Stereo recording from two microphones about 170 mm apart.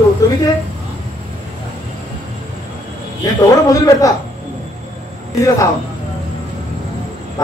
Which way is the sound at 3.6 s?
20° left (ahead or behind).